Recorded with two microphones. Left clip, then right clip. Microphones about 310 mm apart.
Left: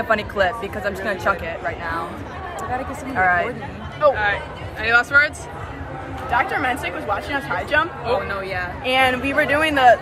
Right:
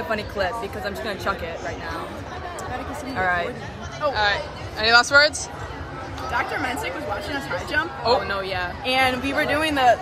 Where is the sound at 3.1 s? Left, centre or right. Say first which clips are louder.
Left 5 dB; centre.